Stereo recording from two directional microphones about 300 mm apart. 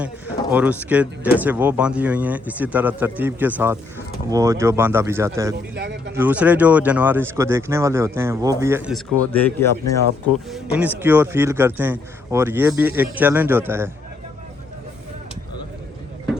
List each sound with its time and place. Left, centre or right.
0.5 s speech: centre
5.7 s speech: right
6.1 s speech: centre
9.3 s speech: centre
9.8 s speech: left
10.5 s speech: centre